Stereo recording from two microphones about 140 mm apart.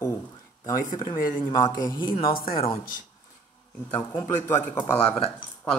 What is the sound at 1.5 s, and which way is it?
A man's voice, 25° left (ahead or behind).